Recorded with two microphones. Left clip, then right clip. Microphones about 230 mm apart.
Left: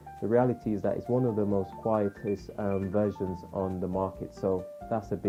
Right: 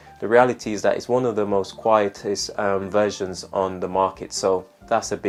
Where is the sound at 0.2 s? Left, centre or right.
Centre.